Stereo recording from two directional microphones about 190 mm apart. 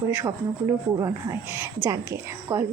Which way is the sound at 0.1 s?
10° right (ahead or behind).